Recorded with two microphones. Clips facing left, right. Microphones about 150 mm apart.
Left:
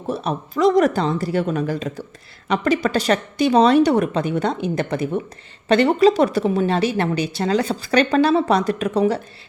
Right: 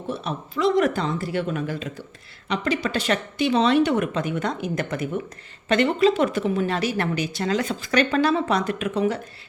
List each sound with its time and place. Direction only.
0.1 s a woman's voice: 40° left (ahead or behind)